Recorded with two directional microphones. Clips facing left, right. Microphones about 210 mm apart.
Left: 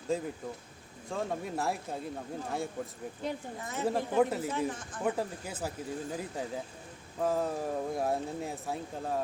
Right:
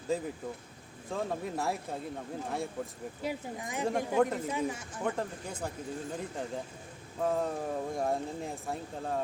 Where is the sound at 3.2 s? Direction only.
10° right (ahead or behind).